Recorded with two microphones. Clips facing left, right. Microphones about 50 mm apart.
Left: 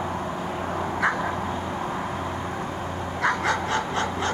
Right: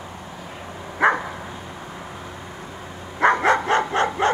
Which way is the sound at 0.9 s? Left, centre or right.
Right.